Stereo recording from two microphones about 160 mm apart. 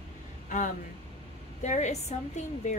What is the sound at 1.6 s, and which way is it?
Speech, 45° left (ahead or behind).